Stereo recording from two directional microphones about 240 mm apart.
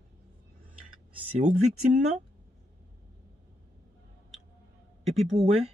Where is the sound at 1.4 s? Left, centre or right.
Right.